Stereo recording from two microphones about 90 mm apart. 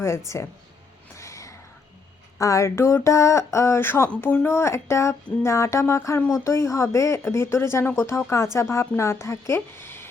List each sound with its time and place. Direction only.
0.3 s speech: 35° left (ahead or behind)
1.1 s gasp: 35° left (ahead or behind)
2.4 s speech: 35° left (ahead or behind)